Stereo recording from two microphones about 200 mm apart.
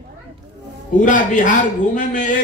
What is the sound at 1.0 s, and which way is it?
A man's voice, 40° left (ahead or behind).